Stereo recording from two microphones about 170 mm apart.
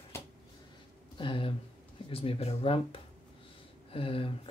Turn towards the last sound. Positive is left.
turn(degrees=30)  # may be behind; listen again after turning